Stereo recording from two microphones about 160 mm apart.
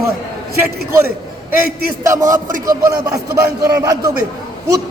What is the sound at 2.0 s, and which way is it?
Speech, 20° right (ahead or behind).